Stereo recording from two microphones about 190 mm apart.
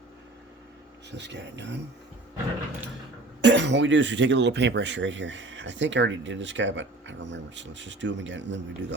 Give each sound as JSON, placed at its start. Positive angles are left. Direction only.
{"t": 1.1, "sound": "speech", "side_deg": -65}
{"t": 3.4, "sound": "speech", "side_deg": -70}